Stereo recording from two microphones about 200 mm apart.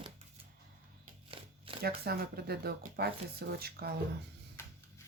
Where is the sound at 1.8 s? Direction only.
50° right (ahead or behind).